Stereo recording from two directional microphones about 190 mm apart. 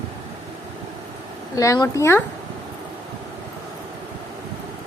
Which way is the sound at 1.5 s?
20° left (ahead or behind).